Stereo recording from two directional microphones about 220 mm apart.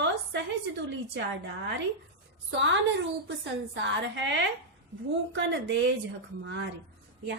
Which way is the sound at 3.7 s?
55° right (ahead or behind).